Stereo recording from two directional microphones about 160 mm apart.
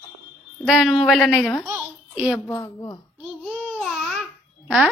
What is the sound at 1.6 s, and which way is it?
Babbling, 15° right (ahead or behind).